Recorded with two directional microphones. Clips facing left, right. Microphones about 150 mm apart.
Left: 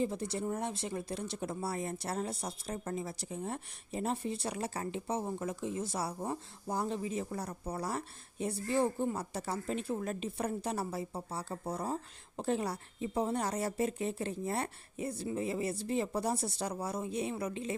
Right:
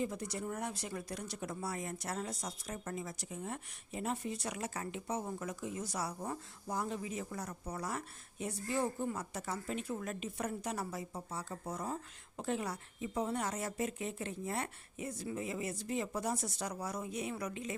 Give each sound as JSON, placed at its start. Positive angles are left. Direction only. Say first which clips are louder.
{"t": 0.0, "sound": "speech", "louder": "left 4 dB", "side_deg": 30}